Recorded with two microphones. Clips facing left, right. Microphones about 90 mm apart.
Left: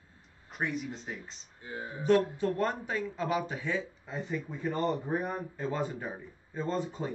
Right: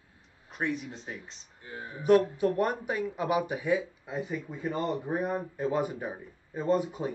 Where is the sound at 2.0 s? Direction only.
15° right (ahead or behind).